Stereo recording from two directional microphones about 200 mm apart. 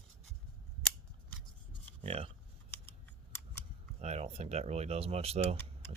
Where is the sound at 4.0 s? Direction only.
35° right (ahead or behind).